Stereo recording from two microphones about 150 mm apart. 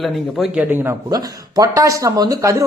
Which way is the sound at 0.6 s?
15° right (ahead or behind).